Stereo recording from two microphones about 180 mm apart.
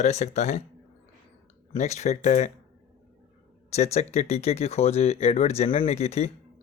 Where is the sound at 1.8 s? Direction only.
40° left (ahead or behind).